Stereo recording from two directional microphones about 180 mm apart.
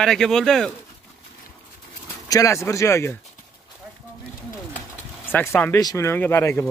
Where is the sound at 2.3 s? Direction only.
15° left (ahead or behind).